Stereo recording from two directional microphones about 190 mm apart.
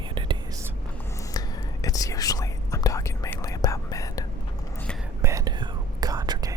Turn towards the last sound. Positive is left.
turn(degrees=-20)  # may be behind; listen again after turning